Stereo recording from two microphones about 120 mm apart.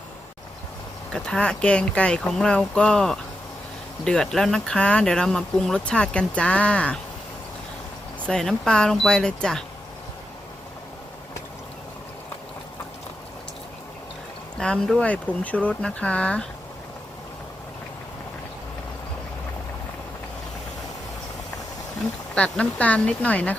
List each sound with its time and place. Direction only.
1.1 s speech: 5° left (ahead or behind)
8.3 s speech: 5° left (ahead or behind)
14.6 s speech: 5° left (ahead or behind)
22.4 s speech: 10° left (ahead or behind)